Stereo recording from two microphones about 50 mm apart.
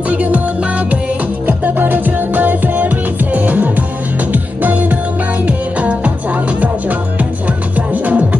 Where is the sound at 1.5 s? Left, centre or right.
Right.